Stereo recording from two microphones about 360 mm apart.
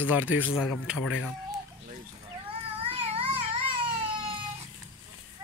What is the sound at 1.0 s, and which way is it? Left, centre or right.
Speech, left.